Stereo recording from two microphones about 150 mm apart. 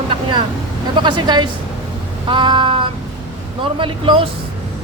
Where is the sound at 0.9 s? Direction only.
30° right (ahead or behind).